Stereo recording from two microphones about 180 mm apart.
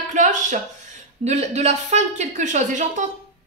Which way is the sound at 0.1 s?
45° right (ahead or behind).